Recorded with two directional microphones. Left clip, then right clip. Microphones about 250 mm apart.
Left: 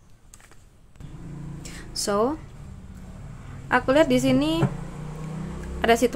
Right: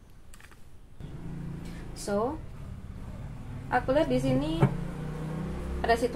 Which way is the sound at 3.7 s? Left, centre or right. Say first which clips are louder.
Left 7 dB; left.